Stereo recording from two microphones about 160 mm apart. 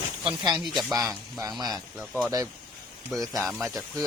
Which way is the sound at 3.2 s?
20° right (ahead or behind).